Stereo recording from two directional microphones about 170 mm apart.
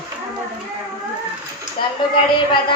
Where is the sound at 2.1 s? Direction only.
30° left (ahead or behind).